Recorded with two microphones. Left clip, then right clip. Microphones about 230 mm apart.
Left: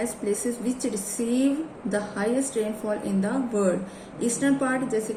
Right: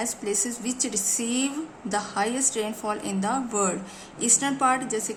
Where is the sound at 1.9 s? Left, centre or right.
Right.